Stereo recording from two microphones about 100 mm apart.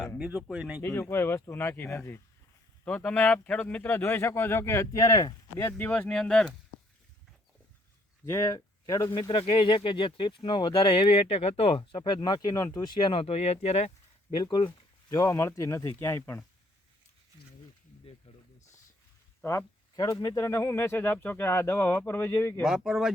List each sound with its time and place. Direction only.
0.2 s speech: 15° right (ahead or behind)
0.8 s speech: 25° left (ahead or behind)
5.7 s speech: 15° left (ahead or behind)
8.2 s speech: 30° left (ahead or behind)
9.3 s speech: 60° left (ahead or behind); by 14.3 s 90° left
14.3 s speech: 45° left (ahead or behind)
15.1 s speech: 30° left (ahead or behind)
18.3 s a sound: 90° left
20.0 s speech: 40° left (ahead or behind)
22.6 s speech: 5° right (ahead or behind)